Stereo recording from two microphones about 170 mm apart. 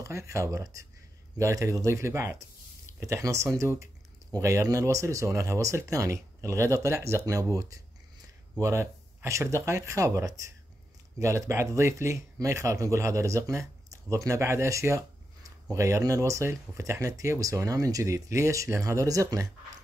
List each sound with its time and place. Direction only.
0.0 s speech: 15° right (ahead or behind)